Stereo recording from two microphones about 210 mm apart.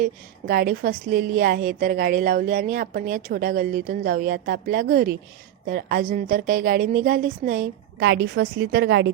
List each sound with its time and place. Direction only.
0.0 s a woman's voice: 45° right (ahead or behind)
7.9 s a woman's voice: 55° right (ahead or behind)